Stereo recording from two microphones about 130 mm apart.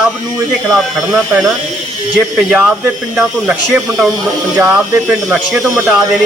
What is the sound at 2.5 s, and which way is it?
A man's voice, 15° right (ahead or behind).